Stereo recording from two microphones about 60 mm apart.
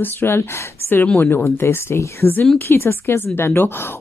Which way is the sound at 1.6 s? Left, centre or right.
Left.